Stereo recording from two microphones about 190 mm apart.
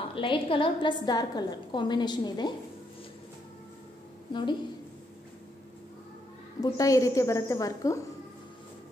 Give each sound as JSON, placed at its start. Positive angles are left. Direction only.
{"t": 0.1, "sound": "a woman's voice", "side_deg": 25}
{"t": 4.3, "sound": "a woman's voice", "side_deg": 25}
{"t": 6.6, "sound": "a woman's voice", "side_deg": 15}